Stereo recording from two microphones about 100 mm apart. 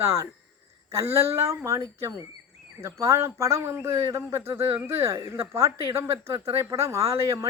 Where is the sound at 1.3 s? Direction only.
30° right (ahead or behind).